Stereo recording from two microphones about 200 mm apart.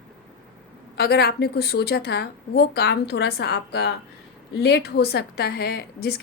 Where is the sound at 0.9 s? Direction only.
55° left (ahead or behind).